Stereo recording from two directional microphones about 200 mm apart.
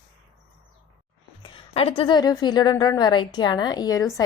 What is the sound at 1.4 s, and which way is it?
A woman's voice, 30° left (ahead or behind).